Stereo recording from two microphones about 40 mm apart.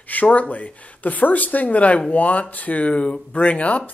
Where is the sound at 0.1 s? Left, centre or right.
Left.